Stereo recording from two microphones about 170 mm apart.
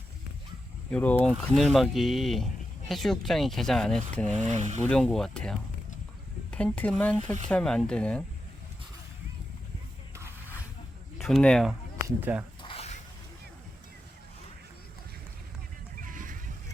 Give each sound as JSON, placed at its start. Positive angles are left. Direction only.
{"t": 0.9, "sound": "speech", "side_deg": 5}
{"t": 4.4, "sound": "speech", "side_deg": -45}
{"t": 4.8, "sound": "speech", "side_deg": 5}
{"t": 10.2, "sound": "a sound", "side_deg": -15}
{"t": 11.2, "sound": "speech", "side_deg": 0}
{"t": 12.0, "sound": "speech", "side_deg": -10}
{"t": 12.6, "sound": "zipper", "side_deg": 35}
{"t": 16.0, "sound": "music", "side_deg": -50}